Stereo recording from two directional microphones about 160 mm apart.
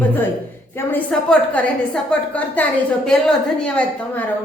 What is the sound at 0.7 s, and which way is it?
A woman's voice, 10° left (ahead or behind).